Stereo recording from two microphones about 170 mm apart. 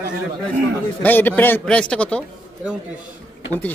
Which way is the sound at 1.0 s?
10° left (ahead or behind).